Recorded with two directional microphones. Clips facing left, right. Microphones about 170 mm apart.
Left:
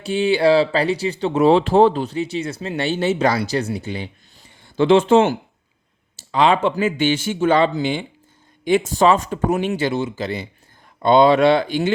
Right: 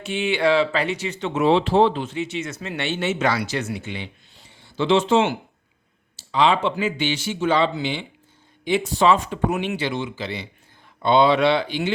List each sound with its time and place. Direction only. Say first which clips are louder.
0.0 s speech: left 5 dB; 35° left (ahead or behind)